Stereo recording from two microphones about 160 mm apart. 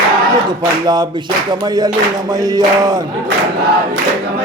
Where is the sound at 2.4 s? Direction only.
25° right (ahead or behind).